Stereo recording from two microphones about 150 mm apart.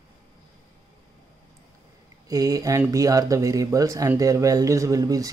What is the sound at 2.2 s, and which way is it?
Speech, 25° right (ahead or behind).